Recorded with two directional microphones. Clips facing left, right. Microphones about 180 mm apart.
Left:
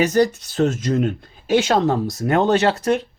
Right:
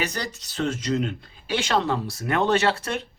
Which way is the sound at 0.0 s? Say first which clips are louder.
Left 13 dB; 50° left (ahead or behind).